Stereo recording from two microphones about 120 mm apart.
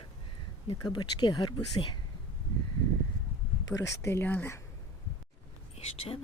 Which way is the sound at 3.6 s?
30° left (ahead or behind).